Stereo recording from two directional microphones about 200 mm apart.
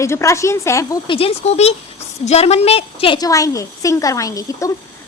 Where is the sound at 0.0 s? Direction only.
15° left (ahead or behind).